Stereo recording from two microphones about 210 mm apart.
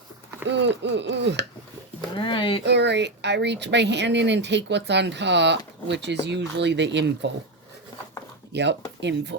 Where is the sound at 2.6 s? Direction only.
55° right (ahead or behind).